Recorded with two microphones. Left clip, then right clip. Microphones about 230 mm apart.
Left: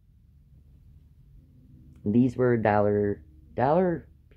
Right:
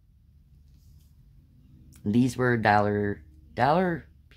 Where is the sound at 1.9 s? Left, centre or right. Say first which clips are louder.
Left 1 dB; right.